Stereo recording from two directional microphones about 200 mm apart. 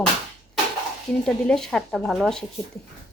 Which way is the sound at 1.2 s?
5° left (ahead or behind).